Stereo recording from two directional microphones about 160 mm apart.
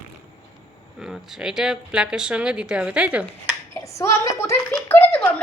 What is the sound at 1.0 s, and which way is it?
A child's voice, centre (ahead or behind).